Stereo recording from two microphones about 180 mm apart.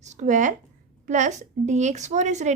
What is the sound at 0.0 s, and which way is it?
A woman's voice, 40° right (ahead or behind).